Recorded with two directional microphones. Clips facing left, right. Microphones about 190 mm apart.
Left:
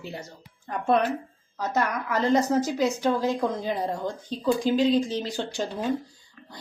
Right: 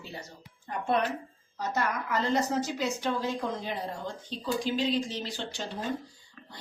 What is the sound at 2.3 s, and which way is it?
A woman's voice, 40° left (ahead or behind).